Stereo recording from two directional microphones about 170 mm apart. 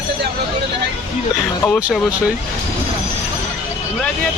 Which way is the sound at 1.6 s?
5° left (ahead or behind).